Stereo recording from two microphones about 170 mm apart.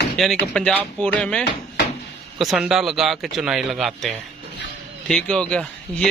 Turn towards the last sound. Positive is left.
turn(degrees=5)  # may be behind; listen again after turning